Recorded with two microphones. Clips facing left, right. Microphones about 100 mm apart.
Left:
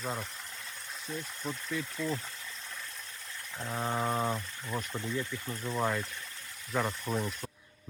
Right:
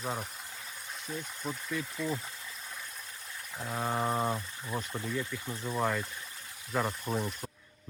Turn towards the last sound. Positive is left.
turn(degrees=-5)  # may be behind; listen again after turning